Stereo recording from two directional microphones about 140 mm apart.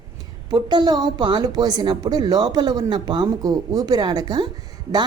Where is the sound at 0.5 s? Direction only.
30° right (ahead or behind).